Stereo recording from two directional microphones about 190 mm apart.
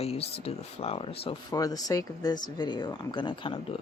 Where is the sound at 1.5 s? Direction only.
20° left (ahead or behind).